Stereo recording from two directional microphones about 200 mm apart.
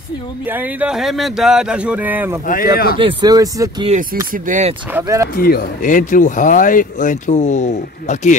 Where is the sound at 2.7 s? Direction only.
50° left (ahead or behind).